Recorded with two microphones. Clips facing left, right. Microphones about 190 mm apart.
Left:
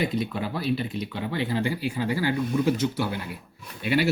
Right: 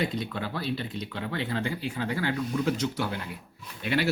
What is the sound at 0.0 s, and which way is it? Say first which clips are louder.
Speech: left 3 dB; 10° left (ahead or behind).